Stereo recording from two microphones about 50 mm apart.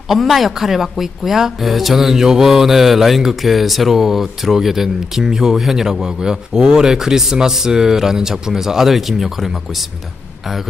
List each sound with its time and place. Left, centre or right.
0.1 s speech: centre